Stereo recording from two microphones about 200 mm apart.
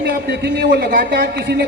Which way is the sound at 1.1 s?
60° right (ahead or behind).